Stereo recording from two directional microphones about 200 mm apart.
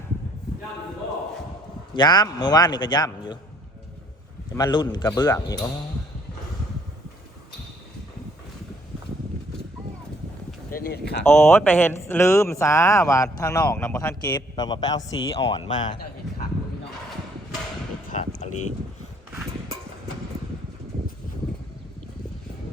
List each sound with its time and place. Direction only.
1.9 s a man's voice: 20° left (ahead or behind)
4.5 s a man's voice: 20° left (ahead or behind)
10.7 s speech: 50° left (ahead or behind)
11.3 s speech: 10° left (ahead or behind)
18.3 s livestock: 35° left (ahead or behind)